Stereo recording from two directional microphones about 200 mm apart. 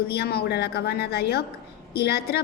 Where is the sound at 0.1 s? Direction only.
55° left (ahead or behind).